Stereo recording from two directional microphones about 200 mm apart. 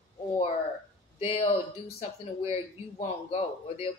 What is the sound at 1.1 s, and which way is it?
Speech, 30° left (ahead or behind).